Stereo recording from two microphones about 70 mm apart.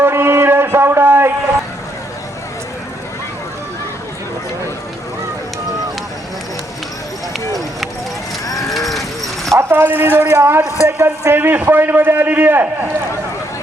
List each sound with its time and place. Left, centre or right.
0.0 s a sound: right
8.9 s clip-clop: centre
9.6 s a man's voice: right